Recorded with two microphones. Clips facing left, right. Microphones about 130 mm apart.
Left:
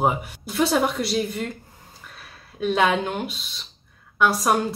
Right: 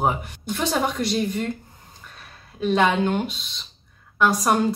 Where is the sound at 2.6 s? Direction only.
Centre (ahead or behind).